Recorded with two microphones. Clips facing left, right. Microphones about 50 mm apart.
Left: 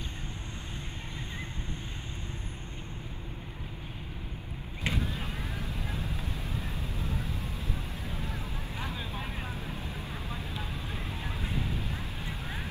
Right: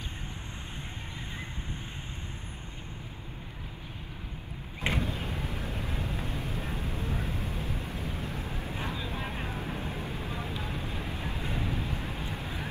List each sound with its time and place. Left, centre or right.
4.8 s vehicle: right